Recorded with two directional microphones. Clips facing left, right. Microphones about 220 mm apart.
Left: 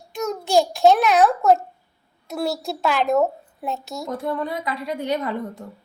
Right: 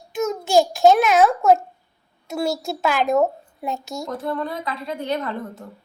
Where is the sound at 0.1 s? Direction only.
Centre (ahead or behind).